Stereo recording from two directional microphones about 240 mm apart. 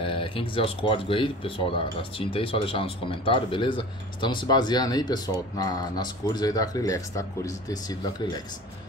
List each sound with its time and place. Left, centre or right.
0.0 s speech: left